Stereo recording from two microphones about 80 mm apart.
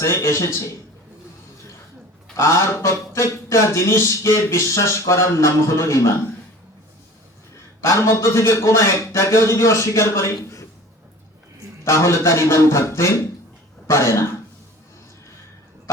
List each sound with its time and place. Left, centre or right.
0.0 s speech: left
2.3 s speech: left
7.8 s speech: left
11.9 s speech: left